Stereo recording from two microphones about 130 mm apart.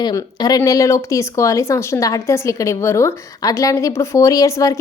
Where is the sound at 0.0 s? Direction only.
30° left (ahead or behind).